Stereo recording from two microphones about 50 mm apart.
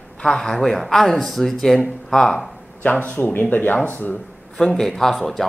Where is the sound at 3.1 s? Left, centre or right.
Left.